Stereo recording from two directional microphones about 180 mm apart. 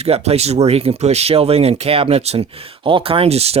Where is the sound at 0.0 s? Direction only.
35° right (ahead or behind).